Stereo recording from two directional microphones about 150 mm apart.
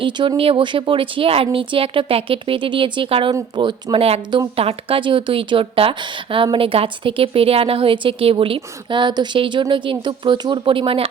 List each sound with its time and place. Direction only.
0.0 s a woman's voice: 35° right (ahead or behind)